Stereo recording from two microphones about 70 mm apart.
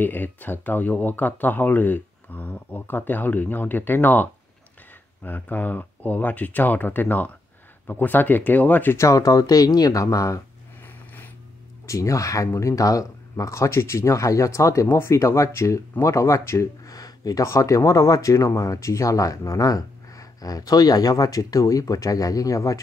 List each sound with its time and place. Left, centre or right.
0.0 s speech: left
8.9 s speech: left
11.8 s speech: left
16.9 s speech: left